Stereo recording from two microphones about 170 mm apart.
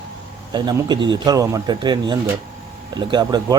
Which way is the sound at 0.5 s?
25° right (ahead or behind).